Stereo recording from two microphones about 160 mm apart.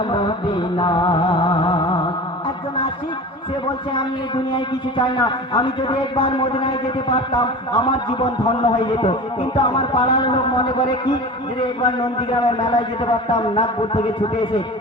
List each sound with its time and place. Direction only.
0.1 s music: 30° left (ahead or behind)
4.9 s a man's voice: 30° left (ahead or behind)